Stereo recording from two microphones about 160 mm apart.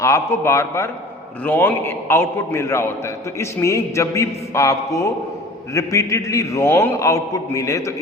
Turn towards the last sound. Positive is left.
turn(degrees=20)  # may be behind; listen again after turning